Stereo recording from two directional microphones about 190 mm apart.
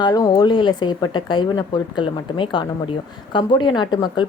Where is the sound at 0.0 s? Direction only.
20° left (ahead or behind).